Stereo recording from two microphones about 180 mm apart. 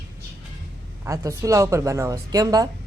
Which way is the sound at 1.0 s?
15° right (ahead or behind).